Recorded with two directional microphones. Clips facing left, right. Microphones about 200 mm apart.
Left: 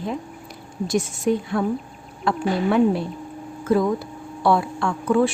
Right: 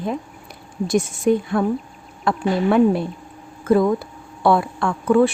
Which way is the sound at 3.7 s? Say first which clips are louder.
Right 3 dB; 55° right (ahead or behind).